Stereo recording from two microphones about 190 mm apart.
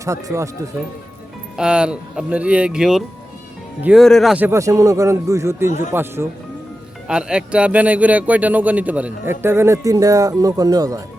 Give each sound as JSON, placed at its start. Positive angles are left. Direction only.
{"t": 0.0, "sound": "speech", "side_deg": -15}
{"t": 1.5, "sound": "speech", "side_deg": -5}